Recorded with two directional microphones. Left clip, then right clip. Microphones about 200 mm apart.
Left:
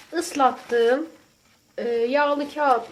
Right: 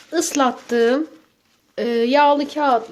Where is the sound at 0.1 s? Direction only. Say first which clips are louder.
Right 2 dB; 55° right (ahead or behind).